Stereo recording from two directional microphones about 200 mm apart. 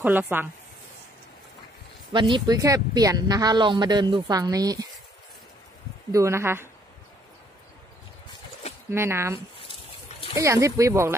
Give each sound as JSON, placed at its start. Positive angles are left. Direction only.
{"t": 0.0, "sound": "speech", "side_deg": -10}
{"t": 2.1, "sound": "speech", "side_deg": -25}
{"t": 6.1, "sound": "speech", "side_deg": -15}
{"t": 8.9, "sound": "speech", "side_deg": -10}
{"t": 9.6, "sound": "a sound", "side_deg": 30}
{"t": 10.3, "sound": "speech", "side_deg": -15}